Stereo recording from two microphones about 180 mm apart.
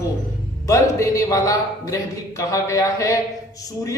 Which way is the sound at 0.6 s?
20° left (ahead or behind).